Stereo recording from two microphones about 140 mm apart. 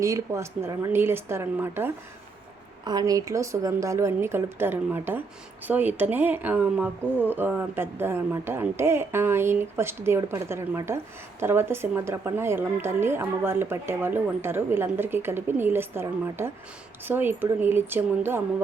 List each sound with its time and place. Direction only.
0.0 s speech: 20° right (ahead or behind)
2.8 s speech: 30° right (ahead or behind)